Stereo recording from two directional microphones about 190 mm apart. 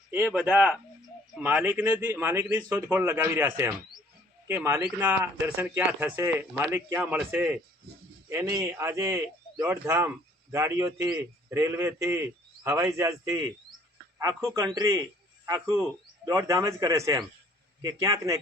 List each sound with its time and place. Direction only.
0.1 s speech: 10° right (ahead or behind)